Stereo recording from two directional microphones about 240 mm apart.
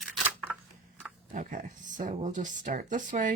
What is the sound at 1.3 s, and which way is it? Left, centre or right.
Speech, right.